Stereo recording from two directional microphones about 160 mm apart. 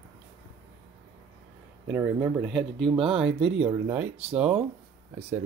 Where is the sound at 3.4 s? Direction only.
35° right (ahead or behind).